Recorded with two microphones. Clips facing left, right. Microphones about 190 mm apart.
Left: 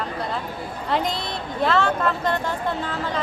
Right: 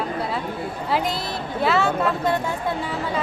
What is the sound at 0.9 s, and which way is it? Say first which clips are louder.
A woman's voice: even; 5° right (ahead or behind).